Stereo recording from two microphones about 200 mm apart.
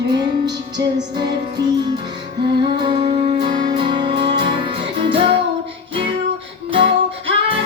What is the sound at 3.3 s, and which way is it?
Music, 20° right (ahead or behind).